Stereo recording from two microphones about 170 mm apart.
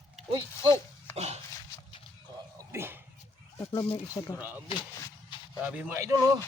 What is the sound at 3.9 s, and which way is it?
Speech, 20° left (ahead or behind).